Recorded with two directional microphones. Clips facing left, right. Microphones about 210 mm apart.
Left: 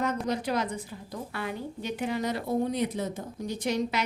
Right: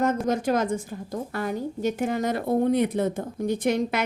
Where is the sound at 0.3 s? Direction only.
45° right (ahead or behind).